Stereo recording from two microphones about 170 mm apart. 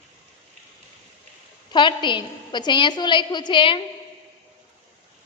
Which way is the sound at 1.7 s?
25° left (ahead or behind).